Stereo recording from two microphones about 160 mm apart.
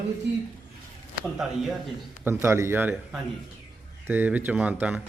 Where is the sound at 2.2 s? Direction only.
15° right (ahead or behind).